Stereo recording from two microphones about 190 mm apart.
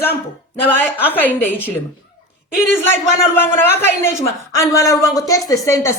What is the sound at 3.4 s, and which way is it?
A woman's voice, 10° left (ahead or behind).